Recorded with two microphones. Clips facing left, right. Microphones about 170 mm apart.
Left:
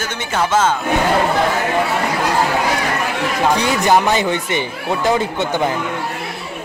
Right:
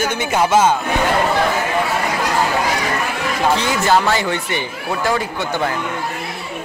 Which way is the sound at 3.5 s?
15° left (ahead or behind).